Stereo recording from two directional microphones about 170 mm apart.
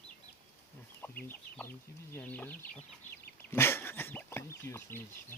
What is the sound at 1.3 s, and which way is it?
Chicken, 10° left (ahead or behind).